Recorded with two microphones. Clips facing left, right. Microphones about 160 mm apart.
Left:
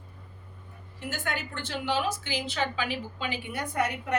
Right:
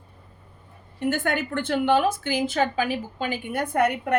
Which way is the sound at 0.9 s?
55° right (ahead or behind).